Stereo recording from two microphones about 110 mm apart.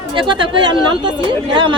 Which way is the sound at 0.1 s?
50° right (ahead or behind).